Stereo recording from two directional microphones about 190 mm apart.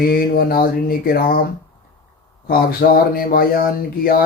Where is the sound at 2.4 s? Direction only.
50° left (ahead or behind).